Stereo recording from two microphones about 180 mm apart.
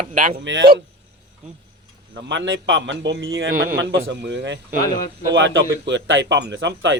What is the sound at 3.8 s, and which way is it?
Speech, 75° right (ahead or behind).